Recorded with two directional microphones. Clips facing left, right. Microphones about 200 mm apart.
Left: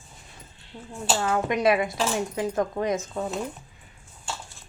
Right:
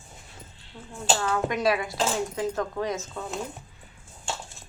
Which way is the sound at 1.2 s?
20° left (ahead or behind).